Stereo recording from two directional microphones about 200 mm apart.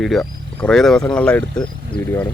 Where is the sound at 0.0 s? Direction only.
Centre (ahead or behind).